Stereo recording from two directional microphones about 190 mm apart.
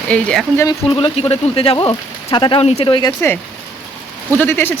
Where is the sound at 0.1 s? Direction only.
5° left (ahead or behind); by 3.1 s 25° left (ahead or behind).